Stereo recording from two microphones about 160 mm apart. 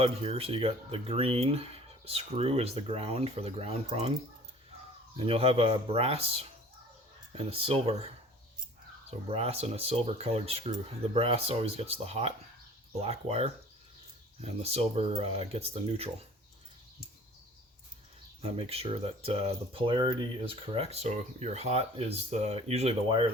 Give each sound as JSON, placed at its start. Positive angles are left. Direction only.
{"t": 0.0, "sound": "speech", "side_deg": -40}
{"t": 18.4, "sound": "speech", "side_deg": -35}